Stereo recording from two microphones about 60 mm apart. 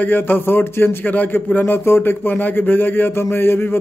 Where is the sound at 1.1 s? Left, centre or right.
Left.